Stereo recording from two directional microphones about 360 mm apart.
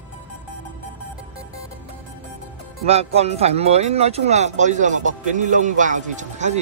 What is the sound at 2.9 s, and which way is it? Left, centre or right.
Speech, centre.